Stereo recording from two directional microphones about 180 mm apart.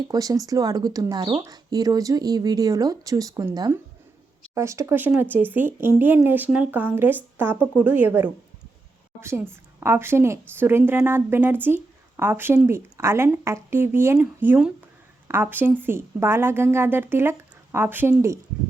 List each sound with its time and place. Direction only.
0.1 s a woman's voice: 20° right (ahead or behind)